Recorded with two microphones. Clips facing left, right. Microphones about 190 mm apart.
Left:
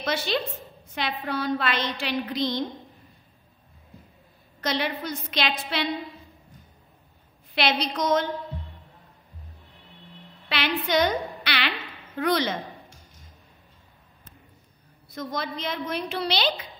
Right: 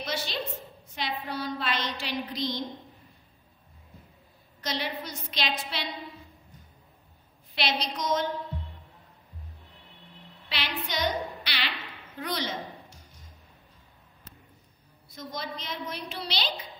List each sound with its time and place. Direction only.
0.0 s a woman's voice: 60° left (ahead or behind)
4.6 s a woman's voice: 60° left (ahead or behind)
7.5 s a woman's voice: 60° left (ahead or behind)
10.5 s a woman's voice: 60° left (ahead or behind)
15.1 s a woman's voice: 60° left (ahead or behind)